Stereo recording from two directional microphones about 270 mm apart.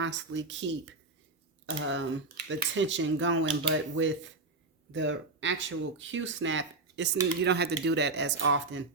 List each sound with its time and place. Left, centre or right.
0.0 s speech: right